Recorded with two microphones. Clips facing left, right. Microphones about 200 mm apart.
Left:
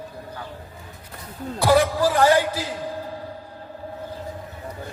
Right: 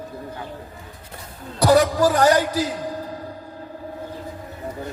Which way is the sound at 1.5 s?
45° right (ahead or behind).